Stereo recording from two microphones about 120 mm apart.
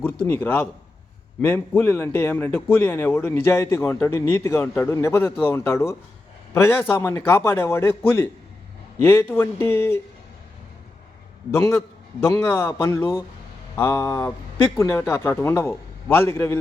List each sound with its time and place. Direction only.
0.0 s a man's voice: 15° left (ahead or behind)
12.5 s a man's voice: 20° left (ahead or behind)